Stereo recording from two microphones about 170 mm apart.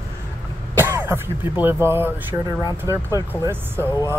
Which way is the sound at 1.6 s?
15° right (ahead or behind).